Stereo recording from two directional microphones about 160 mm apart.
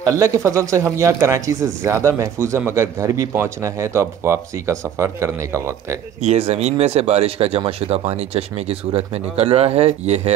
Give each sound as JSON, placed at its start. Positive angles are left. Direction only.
{"t": 0.0, "sound": "a man's voice", "side_deg": -20}
{"t": 6.2, "sound": "speech", "side_deg": -40}